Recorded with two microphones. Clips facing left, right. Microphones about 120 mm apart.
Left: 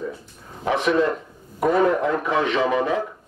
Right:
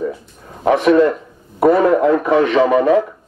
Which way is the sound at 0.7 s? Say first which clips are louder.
Right 8 dB; 50° right (ahead or behind).